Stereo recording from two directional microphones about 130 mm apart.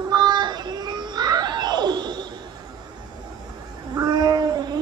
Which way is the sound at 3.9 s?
30° right (ahead or behind).